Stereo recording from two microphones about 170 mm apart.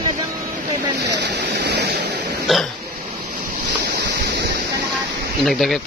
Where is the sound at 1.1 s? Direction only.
90° right.